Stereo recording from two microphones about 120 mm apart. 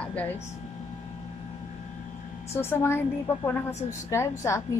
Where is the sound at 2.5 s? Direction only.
20° left (ahead or behind).